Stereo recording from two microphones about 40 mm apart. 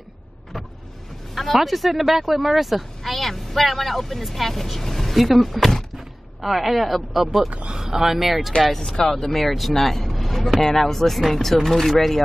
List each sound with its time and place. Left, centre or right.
1.3 s speech: centre
7.4 s speech: right
7.8 s speech: centre
8.7 s speech: centre